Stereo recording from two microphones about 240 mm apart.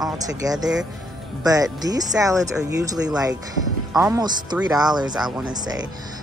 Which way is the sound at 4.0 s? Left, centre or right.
Centre.